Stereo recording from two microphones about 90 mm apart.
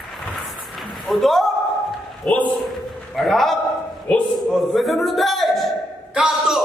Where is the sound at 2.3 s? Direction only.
15° left (ahead or behind).